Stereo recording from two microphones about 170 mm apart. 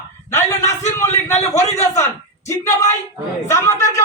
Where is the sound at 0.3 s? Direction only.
15° left (ahead or behind).